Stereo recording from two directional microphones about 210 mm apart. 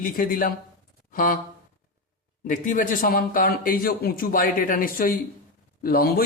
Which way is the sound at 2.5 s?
40° left (ahead or behind).